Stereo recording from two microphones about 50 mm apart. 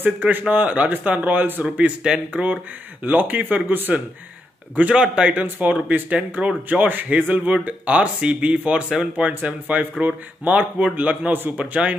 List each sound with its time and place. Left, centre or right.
0.0 s a man's voice: right
4.9 s speech: centre
5.3 s a man's voice: right
8.8 s speech: centre
9.3 s a man's voice: right